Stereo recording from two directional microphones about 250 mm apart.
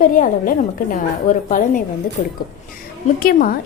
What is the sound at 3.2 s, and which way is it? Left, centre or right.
Speech, left.